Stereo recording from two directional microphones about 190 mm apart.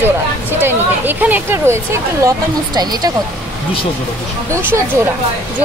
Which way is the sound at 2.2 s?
20° right (ahead or behind).